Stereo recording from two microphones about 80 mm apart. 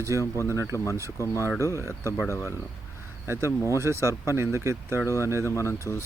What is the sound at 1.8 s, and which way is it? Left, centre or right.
Speech, right.